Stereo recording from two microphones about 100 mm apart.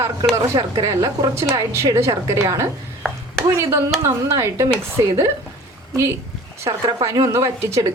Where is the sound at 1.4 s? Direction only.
30° right (ahead or behind).